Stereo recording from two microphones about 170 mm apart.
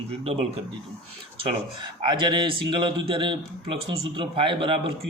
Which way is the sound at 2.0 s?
25° right (ahead or behind).